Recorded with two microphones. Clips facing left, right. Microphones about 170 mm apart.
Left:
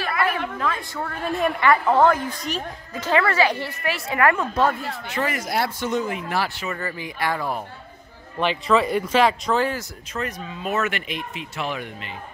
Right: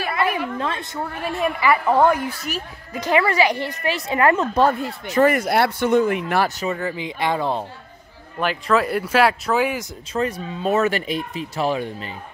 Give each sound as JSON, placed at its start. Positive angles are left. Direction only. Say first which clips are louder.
{"t": 0.2, "sound": "a sound", "louder": "right 2 dB", "side_deg": -10}
{"t": 0.6, "sound": "a sound", "louder": "right 1 dB", "side_deg": -25}
{"t": 1.0, "sound": "a woman's voice", "louder": "even", "side_deg": -5}
{"t": 5.0, "sound": "speech", "louder": "right 10 dB", "side_deg": -45}
{"t": 7.0, "sound": "speech", "louder": "right 3 dB", "side_deg": -20}
{"t": 8.4, "sound": "a woman's voice", "louder": "even", "side_deg": 0}
{"t": 10.1, "sound": "speech", "louder": "right 6 dB", "side_deg": -30}